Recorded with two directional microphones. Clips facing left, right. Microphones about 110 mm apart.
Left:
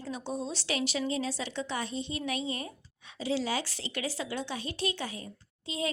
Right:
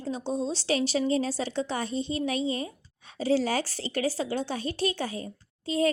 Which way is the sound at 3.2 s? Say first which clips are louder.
Right 6 dB; 40° right (ahead or behind).